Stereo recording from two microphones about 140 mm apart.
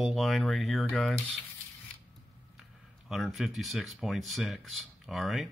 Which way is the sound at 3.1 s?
Centre (ahead or behind).